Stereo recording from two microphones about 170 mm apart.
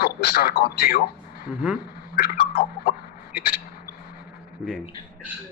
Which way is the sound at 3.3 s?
60° left (ahead or behind).